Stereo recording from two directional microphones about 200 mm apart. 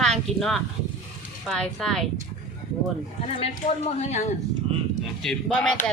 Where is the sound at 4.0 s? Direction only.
35° left (ahead or behind).